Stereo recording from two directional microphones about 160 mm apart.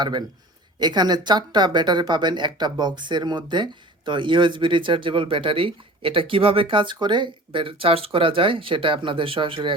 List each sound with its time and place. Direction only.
0.0 s a man's voice: 25° right (ahead or behind)